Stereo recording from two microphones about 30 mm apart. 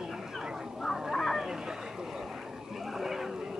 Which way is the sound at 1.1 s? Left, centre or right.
Centre.